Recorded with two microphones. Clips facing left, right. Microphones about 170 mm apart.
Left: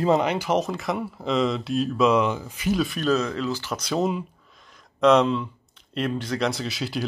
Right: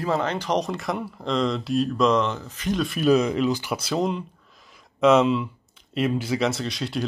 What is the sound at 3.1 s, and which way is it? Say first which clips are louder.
Speech: right 7 dB; 15° right (ahead or behind).